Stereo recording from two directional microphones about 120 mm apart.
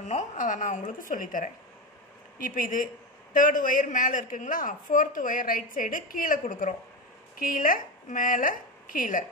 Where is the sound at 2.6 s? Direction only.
90° left.